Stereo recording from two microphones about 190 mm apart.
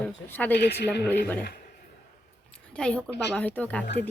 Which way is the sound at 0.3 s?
10° left (ahead or behind).